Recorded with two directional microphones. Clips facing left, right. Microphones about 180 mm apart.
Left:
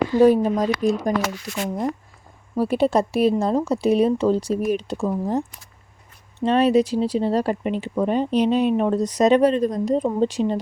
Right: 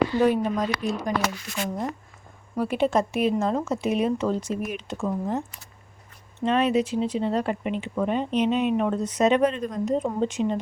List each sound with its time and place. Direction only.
0.1 s speech: 40° left (ahead or behind)
2.6 s speech: 35° left (ahead or behind)
6.4 s speech: 35° left (ahead or behind)